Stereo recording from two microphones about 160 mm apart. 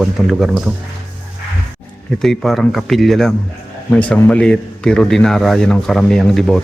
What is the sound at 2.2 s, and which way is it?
A man's voice, centre (ahead or behind).